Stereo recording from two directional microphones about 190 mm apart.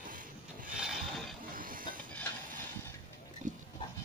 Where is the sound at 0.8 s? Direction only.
Centre (ahead or behind).